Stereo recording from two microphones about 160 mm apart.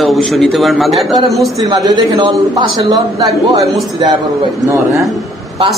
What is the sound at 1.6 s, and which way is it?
A man's voice, 25° right (ahead or behind).